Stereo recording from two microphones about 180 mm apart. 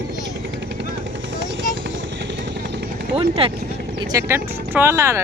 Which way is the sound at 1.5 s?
90° right.